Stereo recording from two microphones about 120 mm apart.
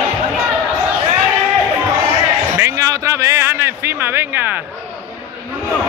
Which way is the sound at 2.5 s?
25° right (ahead or behind).